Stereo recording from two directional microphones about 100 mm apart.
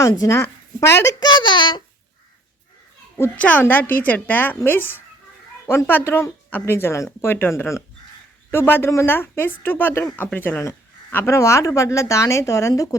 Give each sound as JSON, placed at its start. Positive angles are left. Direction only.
{"t": 0.1, "sound": "speech", "side_deg": 35}
{"t": 1.2, "sound": "a child's voice", "side_deg": 50}
{"t": 3.3, "sound": "a man's voice", "side_deg": 15}